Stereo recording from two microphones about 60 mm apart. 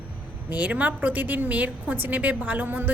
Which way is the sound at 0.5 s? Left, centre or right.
Right.